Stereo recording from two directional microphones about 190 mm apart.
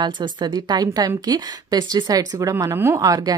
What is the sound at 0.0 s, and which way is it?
A woman's voice, 25° right (ahead or behind).